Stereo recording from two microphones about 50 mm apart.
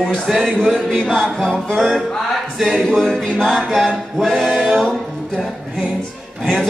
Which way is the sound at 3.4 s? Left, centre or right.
Centre.